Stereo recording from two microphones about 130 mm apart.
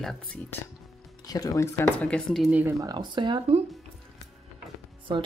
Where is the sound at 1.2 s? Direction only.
30° left (ahead or behind).